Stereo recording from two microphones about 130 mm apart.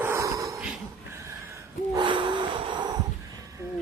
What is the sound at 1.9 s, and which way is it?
Snort, 40° right (ahead or behind).